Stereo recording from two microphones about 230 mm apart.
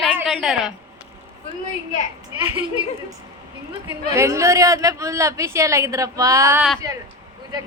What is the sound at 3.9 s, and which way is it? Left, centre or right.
Speech, centre.